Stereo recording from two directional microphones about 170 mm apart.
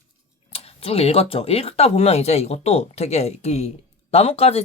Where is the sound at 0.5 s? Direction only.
35° left (ahead or behind).